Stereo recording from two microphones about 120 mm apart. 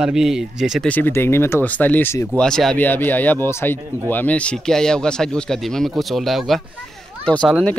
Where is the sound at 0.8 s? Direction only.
15° left (ahead or behind).